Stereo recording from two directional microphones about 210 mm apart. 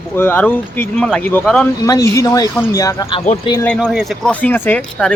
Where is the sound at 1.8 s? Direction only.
15° left (ahead or behind).